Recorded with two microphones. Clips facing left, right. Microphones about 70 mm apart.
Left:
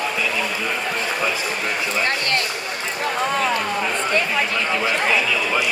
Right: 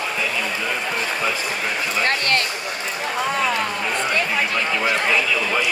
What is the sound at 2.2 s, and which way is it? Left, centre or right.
Speech, right.